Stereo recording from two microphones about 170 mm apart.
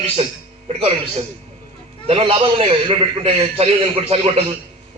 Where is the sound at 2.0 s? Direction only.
30° right (ahead or behind).